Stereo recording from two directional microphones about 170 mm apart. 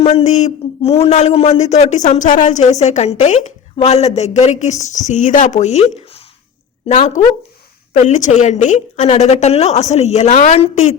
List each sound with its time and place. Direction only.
0.0 s a man's voice: 35° left (ahead or behind)